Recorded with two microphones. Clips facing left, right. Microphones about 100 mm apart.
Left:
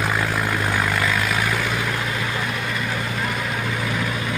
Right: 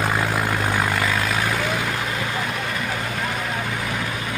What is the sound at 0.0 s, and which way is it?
Vehicle, 20° right (ahead or behind).